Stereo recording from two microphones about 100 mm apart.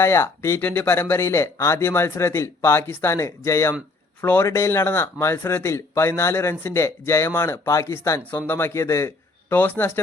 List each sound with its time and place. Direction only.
0.0 s speech: 25° left (ahead or behind)